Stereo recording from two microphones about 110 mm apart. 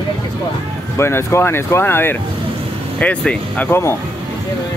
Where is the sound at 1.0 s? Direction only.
25° left (ahead or behind).